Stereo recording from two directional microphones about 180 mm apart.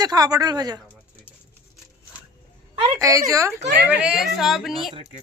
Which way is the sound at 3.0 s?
20° right (ahead or behind).